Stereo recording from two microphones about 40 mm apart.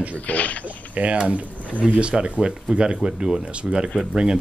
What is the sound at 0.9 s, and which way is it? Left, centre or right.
Speech, right.